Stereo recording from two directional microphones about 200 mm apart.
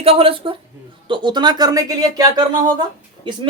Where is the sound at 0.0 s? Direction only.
30° right (ahead or behind).